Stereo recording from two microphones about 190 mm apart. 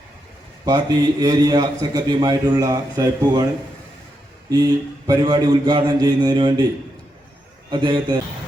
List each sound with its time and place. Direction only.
0.6 s a man's voice: 20° right (ahead or behind)
4.4 s a man's voice: 20° right (ahead or behind)
7.7 s a man's voice: 25° right (ahead or behind)